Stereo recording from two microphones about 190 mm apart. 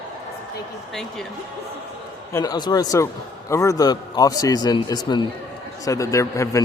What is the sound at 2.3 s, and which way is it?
A man's voice, 20° left (ahead or behind).